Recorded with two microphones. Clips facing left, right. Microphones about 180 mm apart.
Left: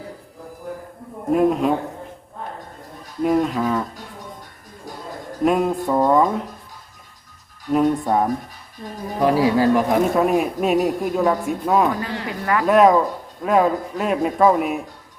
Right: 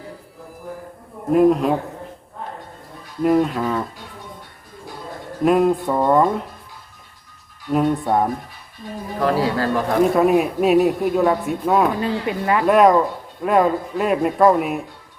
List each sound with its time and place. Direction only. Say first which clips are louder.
1.3 s speech: right 2 dB; centre (ahead or behind)
3.2 s speech: right 1 dB; centre (ahead or behind)
5.4 s speech: right 3 dB; centre (ahead or behind)
7.7 s speech: even; centre (ahead or behind)
9.2 s speech: left 3 dB; 15° left (ahead or behind)
10.0 s speech: right 2 dB; centre (ahead or behind)
11.9 s speech: right 5 dB; 20° right (ahead or behind)
12.6 s speech: even; centre (ahead or behind)